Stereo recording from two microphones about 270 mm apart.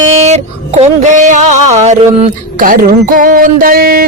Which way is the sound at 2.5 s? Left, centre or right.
Right.